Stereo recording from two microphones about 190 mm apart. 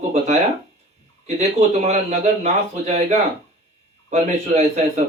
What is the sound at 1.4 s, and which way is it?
Speech, 35° right (ahead or behind).